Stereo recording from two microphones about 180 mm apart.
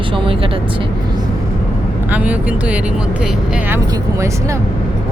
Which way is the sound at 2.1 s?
10° right (ahead or behind).